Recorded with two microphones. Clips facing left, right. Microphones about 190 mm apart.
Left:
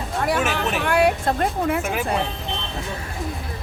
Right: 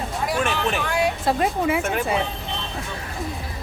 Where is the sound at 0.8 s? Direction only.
65° left (ahead or behind).